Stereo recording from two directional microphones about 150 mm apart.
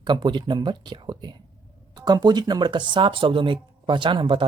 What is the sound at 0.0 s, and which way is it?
Speech, 30° right (ahead or behind).